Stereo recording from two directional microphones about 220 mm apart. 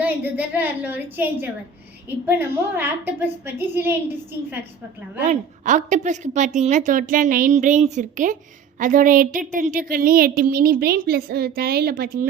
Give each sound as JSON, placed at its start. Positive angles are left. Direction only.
{"t": 0.0, "sound": "a woman's voice", "side_deg": -5}
{"t": 5.2, "sound": "a woman's voice", "side_deg": -35}